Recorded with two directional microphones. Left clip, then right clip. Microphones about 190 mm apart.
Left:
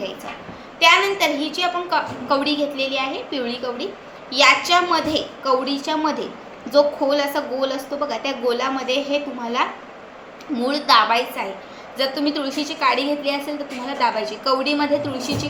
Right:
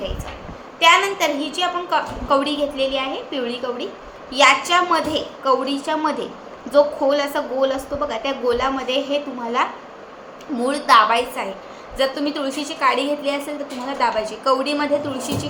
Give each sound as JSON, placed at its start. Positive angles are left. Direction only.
{"t": 0.8, "sound": "a woman's voice", "side_deg": -10}